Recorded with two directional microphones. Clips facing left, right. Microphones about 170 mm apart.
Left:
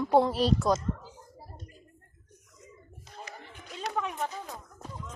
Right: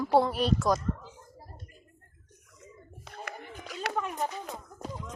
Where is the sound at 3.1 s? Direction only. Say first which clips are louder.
Right 2 dB; 65° right (ahead or behind).